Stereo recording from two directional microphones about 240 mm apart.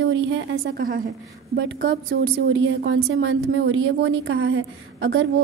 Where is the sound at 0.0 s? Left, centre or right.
Right.